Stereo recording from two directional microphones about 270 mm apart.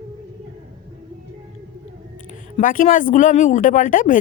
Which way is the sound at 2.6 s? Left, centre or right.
Left.